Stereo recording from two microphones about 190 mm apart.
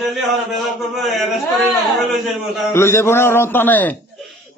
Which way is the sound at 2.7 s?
15° left (ahead or behind).